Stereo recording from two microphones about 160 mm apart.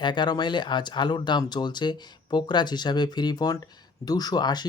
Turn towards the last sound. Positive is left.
turn(degrees=25)  # may be behind; listen again after turning